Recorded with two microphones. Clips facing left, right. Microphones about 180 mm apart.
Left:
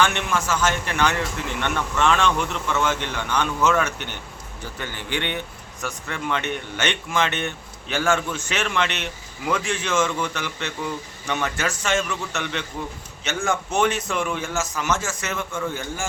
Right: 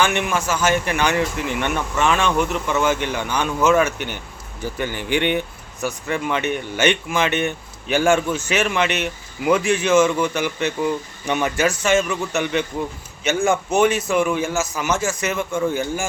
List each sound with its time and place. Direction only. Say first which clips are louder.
0.0 s a man's voice: right 2 dB; 10° right (ahead or behind)